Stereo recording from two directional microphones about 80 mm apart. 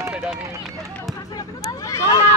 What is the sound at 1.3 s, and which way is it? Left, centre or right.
Vehicle, left.